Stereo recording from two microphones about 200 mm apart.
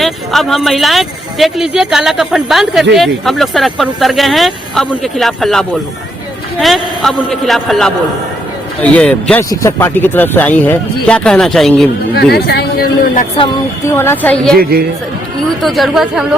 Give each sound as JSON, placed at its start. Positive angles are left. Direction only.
{"t": 0.0, "sound": "speech", "side_deg": 0}
{"t": 12.1, "sound": "speech", "side_deg": 55}
{"t": 13.9, "sound": "speech", "side_deg": 10}
{"t": 14.6, "sound": "speech", "side_deg": -50}
{"t": 15.6, "sound": "speech", "side_deg": 0}